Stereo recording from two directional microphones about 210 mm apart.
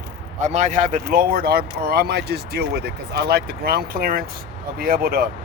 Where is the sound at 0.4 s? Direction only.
35° right (ahead or behind).